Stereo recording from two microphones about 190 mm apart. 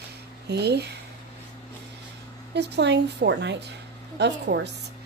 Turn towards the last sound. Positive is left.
turn(degrees=-65)  # may be behind; listen again after turning